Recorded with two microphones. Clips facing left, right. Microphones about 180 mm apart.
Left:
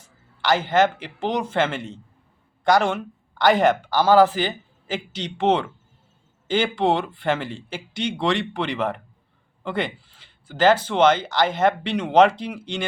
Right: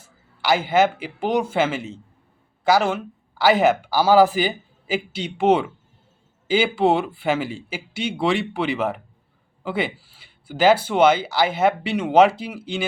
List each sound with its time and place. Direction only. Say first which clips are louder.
0.0 s speech: even; 10° right (ahead or behind)